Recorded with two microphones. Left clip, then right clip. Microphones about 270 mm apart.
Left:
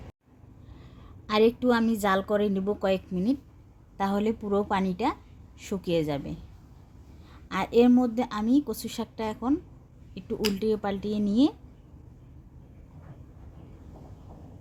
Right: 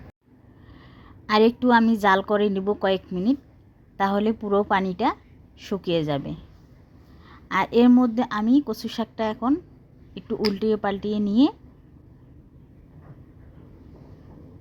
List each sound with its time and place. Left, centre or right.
1.3 s a woman's voice: centre